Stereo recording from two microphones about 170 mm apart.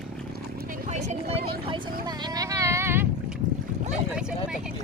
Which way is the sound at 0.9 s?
40° right (ahead or behind).